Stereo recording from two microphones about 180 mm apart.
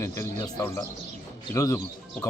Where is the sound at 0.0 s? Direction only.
15° left (ahead or behind).